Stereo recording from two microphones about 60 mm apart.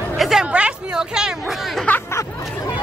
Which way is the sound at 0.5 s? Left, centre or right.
Centre.